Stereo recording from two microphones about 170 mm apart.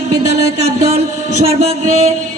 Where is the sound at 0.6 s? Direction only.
40° right (ahead or behind).